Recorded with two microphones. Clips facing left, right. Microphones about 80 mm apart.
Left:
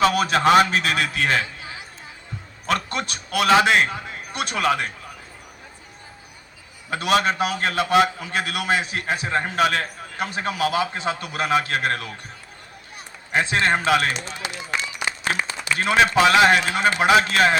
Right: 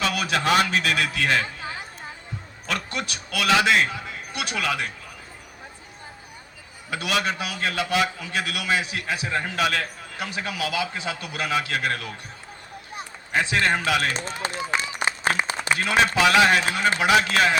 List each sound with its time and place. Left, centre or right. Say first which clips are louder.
0.0 s a man's voice: left 6 dB; left
1.4 s a sound: even; right
2.6 s a man's voice: left 5 dB; left
6.9 s a man's voice: left 5 dB; left
13.3 s a man's voice: left 2 dB; left
14.1 s speech: right 1 dB; right
14.9 s a sound: right 2 dB; right
15.8 s a man's voice: left 4 dB; left